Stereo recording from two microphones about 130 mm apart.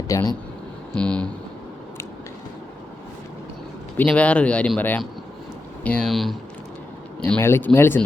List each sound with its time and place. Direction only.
0.1 s speech: 30° left (ahead or behind)
0.9 s speech: 10° left (ahead or behind)
3.9 s speech: 10° left (ahead or behind)
7.3 s speech: 20° left (ahead or behind)